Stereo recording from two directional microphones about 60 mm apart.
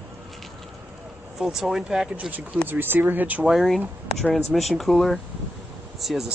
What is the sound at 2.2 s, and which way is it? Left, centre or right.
Speech, right.